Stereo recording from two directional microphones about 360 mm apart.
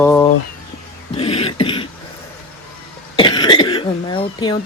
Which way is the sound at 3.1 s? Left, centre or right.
Centre.